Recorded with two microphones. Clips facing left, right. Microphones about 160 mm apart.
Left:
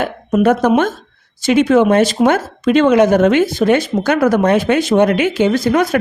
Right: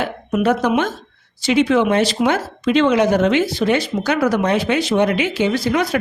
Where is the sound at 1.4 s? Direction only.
50° left (ahead or behind).